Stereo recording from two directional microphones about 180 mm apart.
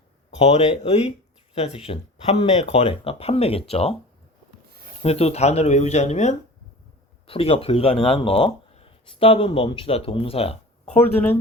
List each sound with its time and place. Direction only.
0.3 s speech: 40° left (ahead or behind)
5.0 s speech: 35° left (ahead or behind)
10.8 s speech: 10° left (ahead or behind)